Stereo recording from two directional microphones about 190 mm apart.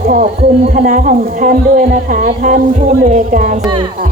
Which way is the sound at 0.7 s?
45° right (ahead or behind).